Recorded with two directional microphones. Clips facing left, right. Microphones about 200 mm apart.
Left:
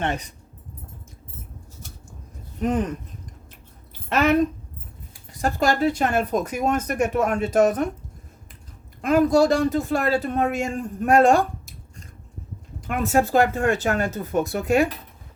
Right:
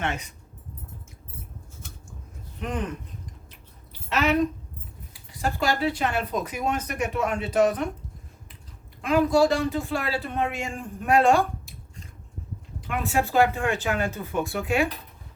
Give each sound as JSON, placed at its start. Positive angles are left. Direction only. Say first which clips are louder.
{"t": 0.0, "sound": "speech", "louder": "left 4 dB", "side_deg": 35}
{"t": 2.6, "sound": "speech", "louder": "left 8 dB", "side_deg": 40}
{"t": 4.1, "sound": "speech", "louder": "left 4 dB", "side_deg": 50}
{"t": 5.4, "sound": "speech", "louder": "left 4 dB", "side_deg": 45}
{"t": 9.0, "sound": "speech", "louder": "left 3 dB", "side_deg": 45}
{"t": 12.8, "sound": "speech", "louder": "left 5 dB", "side_deg": 45}